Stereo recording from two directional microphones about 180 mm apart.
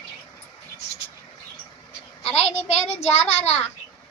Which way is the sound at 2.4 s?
35° left (ahead or behind).